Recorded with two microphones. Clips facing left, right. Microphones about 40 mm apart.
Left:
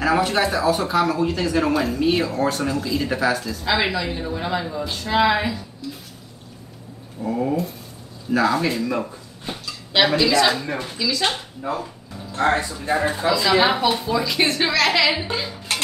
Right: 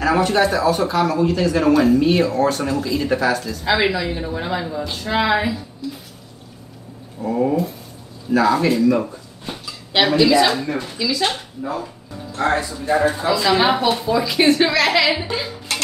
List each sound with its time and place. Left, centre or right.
0.0 s speech: centre
5.8 s drip: centre
7.2 s ratchet: centre
8.3 s speech: centre
11.0 s ratchet: centre
12.4 s speech: left
13.3 s speech: centre